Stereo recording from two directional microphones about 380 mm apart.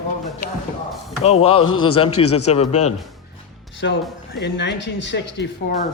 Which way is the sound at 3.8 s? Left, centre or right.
Left.